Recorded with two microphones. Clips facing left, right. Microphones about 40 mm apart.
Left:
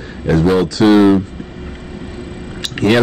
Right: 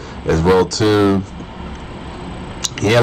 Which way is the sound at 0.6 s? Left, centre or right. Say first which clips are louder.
Left 3 dB; centre.